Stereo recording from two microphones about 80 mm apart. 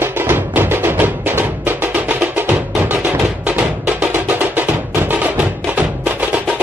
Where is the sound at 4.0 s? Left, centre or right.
Right.